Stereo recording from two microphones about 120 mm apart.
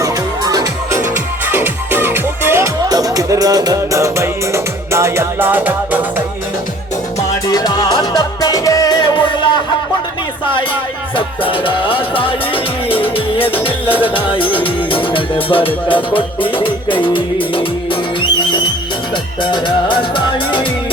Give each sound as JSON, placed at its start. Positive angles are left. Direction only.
{"t": 0.0, "sound": "music", "side_deg": -30}
{"t": 7.4, "sound": "music", "side_deg": 35}
{"t": 11.1, "sound": "speech", "side_deg": 45}
{"t": 18.2, "sound": "music", "side_deg": 40}